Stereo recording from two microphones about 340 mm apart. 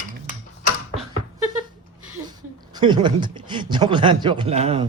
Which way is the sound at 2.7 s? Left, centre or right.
Centre.